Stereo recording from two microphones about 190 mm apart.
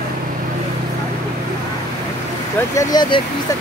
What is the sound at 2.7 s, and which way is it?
Speech, 20° left (ahead or behind).